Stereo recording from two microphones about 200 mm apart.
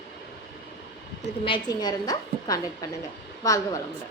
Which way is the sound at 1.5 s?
20° left (ahead or behind).